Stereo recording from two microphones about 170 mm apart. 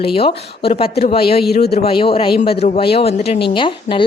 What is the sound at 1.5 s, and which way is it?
Speech, 70° left (ahead or behind).